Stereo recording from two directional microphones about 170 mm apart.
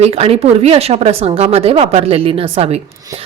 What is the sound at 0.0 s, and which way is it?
Speech, 35° right (ahead or behind).